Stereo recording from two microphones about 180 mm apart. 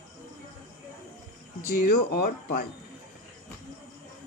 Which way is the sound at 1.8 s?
65° left (ahead or behind).